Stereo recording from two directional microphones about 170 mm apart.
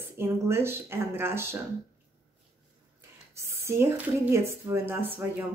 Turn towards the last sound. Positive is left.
turn(degrees=-15)  # may be behind; listen again after turning